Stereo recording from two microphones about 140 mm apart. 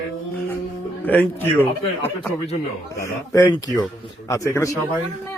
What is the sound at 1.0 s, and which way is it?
A man's voice, 15° left (ahead or behind).